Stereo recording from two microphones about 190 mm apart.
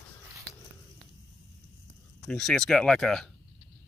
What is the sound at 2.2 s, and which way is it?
Speech, centre (ahead or behind).